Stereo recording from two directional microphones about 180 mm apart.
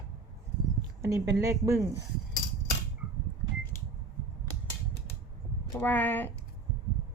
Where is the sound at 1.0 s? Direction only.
15° right (ahead or behind).